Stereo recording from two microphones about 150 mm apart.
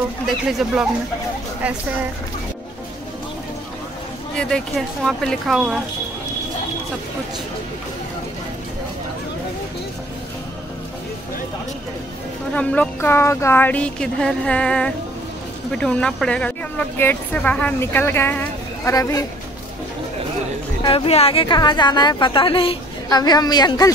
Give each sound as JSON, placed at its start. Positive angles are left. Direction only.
{"t": 0.3, "sound": "speech", "side_deg": 0}
{"t": 4.4, "sound": "speech", "side_deg": 5}
{"t": 12.5, "sound": "a woman's voice", "side_deg": 10}
{"t": 20.8, "sound": "a woman's voice", "side_deg": 40}
{"t": 23.0, "sound": "a woman's voice", "side_deg": 25}